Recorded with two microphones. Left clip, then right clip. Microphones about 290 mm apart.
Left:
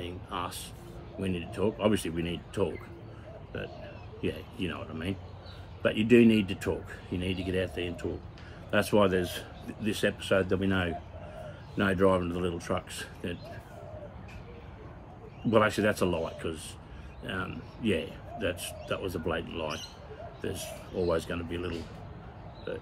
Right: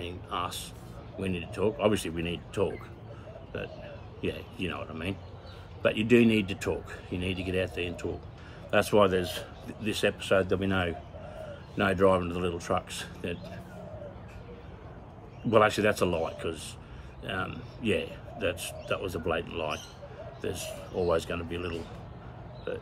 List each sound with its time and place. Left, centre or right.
0.0 s music: centre
1.2 s speech: centre
4.2 s speech: centre
15.5 s speech: centre